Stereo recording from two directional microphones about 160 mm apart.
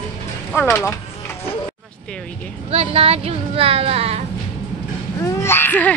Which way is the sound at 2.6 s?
40° right (ahead or behind).